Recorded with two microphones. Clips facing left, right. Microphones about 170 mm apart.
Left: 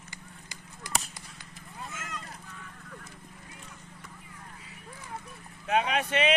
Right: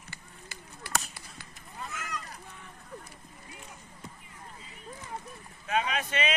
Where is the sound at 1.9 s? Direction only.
25° left (ahead or behind).